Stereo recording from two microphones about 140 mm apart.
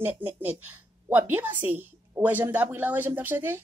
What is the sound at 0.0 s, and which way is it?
A woman's voice, 15° right (ahead or behind).